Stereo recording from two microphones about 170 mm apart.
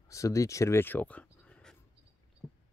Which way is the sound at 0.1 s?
20° left (ahead or behind).